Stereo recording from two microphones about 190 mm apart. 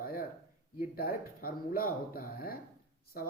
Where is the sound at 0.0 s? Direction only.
50° left (ahead or behind).